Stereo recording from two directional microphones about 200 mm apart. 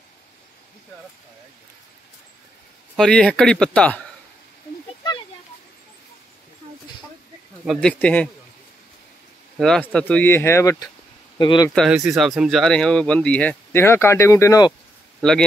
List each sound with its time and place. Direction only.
3.0 s speech: 5° left (ahead or behind)
7.6 s speech: centre (ahead or behind)
9.6 s speech: 5° left (ahead or behind); by 11.7 s 20° left (ahead or behind)
11.7 s speech: centre (ahead or behind); by 14.7 s 15° left (ahead or behind)
15.1 s speech: 5° left (ahead or behind)